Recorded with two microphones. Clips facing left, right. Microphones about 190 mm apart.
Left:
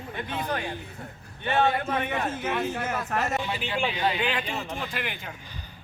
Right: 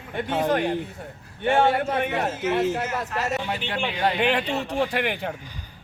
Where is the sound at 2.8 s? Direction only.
55° left (ahead or behind).